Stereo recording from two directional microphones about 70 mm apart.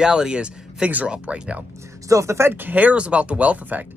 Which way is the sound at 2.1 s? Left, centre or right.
Right.